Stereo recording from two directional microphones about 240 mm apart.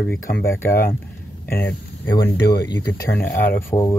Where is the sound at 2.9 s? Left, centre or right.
Centre.